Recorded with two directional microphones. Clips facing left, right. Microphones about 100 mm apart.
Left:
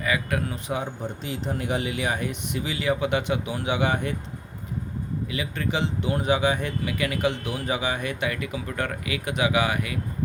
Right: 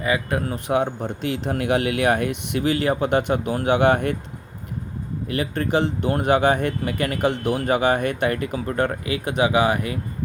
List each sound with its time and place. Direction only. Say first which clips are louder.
0.0 s speech: right 4 dB; 30° right (ahead or behind)
0.5 s speech: right 8 dB; 60° right (ahead or behind)
5.3 s speech: right 8 dB; 50° right (ahead or behind); by 10.0 s 35° right (ahead or behind)